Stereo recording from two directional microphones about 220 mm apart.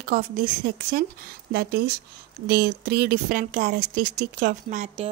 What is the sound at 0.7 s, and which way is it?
Speech, 45° right (ahead or behind).